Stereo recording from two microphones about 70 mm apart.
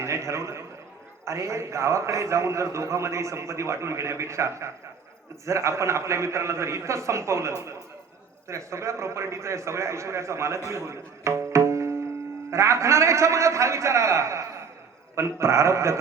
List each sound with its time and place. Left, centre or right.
0.0 s a man's voice: right
10.7 s tabla: right
12.5 s a man's voice: right